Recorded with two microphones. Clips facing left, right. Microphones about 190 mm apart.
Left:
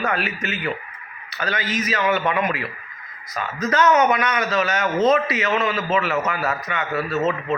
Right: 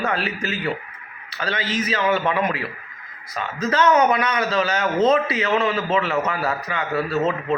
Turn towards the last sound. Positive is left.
turn(degrees=0)  # may be behind; listen again after turning